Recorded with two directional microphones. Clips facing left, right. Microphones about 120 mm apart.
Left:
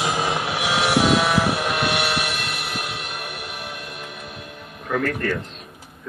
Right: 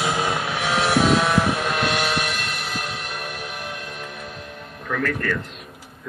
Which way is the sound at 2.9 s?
5° left (ahead or behind).